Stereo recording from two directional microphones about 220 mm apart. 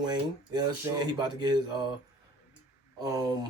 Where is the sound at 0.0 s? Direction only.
20° right (ahead or behind).